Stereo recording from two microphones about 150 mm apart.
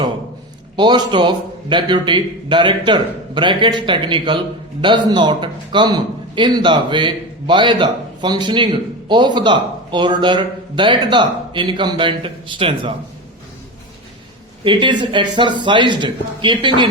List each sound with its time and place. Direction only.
0.8 s a man's voice: 30° right (ahead or behind)
14.6 s a man's voice: 30° right (ahead or behind)